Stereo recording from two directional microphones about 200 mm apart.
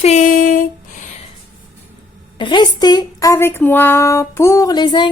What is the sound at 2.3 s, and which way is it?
A man's voice, 20° left (ahead or behind).